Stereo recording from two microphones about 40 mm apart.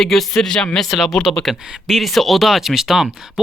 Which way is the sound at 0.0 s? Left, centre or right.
Centre.